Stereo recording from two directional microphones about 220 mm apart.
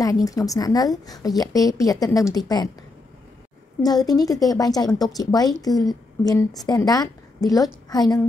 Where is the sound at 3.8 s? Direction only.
15° left (ahead or behind).